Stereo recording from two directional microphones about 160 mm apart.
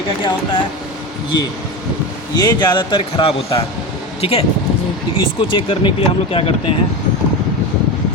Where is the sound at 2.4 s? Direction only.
25° left (ahead or behind).